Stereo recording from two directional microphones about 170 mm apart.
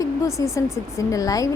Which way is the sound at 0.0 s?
20° left (ahead or behind).